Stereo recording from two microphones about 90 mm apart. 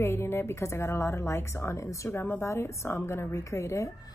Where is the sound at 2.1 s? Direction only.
25° left (ahead or behind).